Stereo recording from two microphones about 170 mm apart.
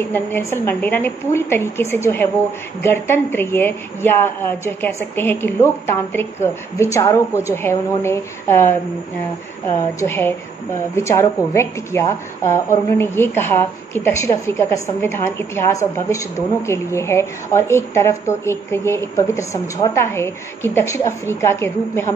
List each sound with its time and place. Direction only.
0.1 s a woman's voice: 15° left (ahead or behind)